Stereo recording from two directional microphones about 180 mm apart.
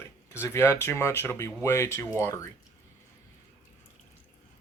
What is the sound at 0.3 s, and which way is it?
Speech, 15° left (ahead or behind).